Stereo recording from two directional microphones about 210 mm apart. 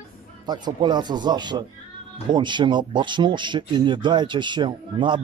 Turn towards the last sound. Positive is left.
turn(degrees=-20)  # may be behind; listen again after turning